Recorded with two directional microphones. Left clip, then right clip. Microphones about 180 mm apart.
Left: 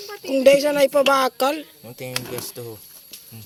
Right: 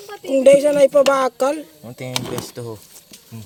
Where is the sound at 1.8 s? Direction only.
50° right (ahead or behind).